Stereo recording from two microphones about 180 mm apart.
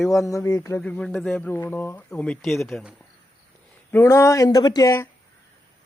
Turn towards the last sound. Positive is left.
turn(degrees=20)  # may be behind; listen again after turning